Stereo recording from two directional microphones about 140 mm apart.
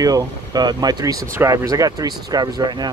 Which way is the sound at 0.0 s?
25° right (ahead or behind).